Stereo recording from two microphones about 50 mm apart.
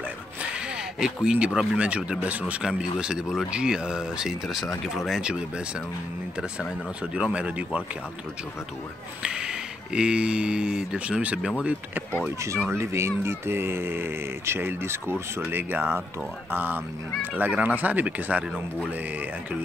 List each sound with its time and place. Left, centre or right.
0.9 s speech: centre
1.8 s speech: right
2.6 s speech: centre
7.2 s speech: right
9.2 s speech: centre
12.6 s speech: right
17.4 s speech: right